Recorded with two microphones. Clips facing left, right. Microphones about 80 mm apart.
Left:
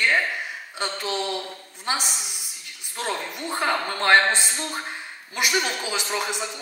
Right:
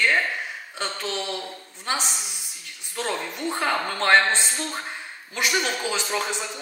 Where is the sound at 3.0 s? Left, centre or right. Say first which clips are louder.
Right 1 dB; centre.